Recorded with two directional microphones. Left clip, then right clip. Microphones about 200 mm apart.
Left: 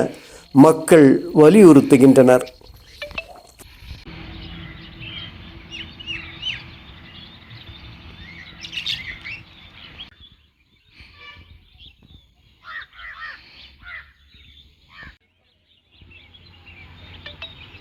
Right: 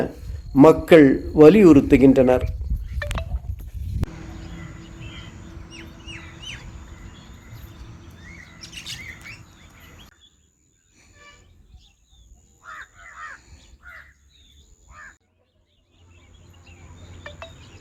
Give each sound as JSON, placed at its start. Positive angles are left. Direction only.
{"t": 0.5, "sound": "a man's voice", "side_deg": 10}
{"t": 8.5, "sound": "bird", "side_deg": 30}
{"t": 13.1, "sound": "crow", "side_deg": -10}